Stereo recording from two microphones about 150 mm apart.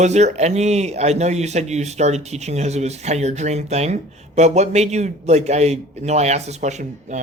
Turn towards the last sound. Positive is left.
turn(degrees=-50)  # may be behind; listen again after turning